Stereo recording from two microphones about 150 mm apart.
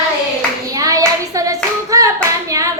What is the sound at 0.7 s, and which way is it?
Hands, 25° right (ahead or behind).